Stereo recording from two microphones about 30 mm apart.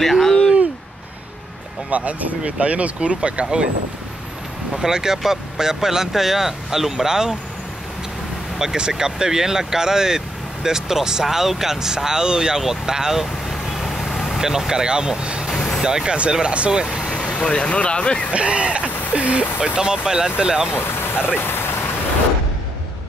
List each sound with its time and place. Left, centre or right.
0.0 s a sound: centre
1.9 s speech: right
3.4 s a sound: right
4.7 s speech: right
8.7 s speech: right
13.5 s vehicle: centre
14.4 s speech: centre
15.8 s speech: right
16.5 s a sound: right
17.1 s speech: left
18.3 s a sound: right
19.6 s speech: right